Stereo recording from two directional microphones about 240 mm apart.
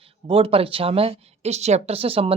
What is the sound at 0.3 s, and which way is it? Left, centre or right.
Speech, right.